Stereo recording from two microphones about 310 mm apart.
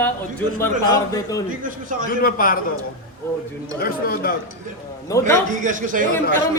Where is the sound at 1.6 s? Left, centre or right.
Right.